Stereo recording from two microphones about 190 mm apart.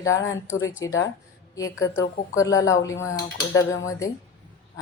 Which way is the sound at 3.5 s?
90° left.